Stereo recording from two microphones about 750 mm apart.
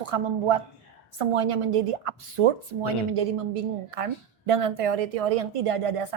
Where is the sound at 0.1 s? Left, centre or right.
Right.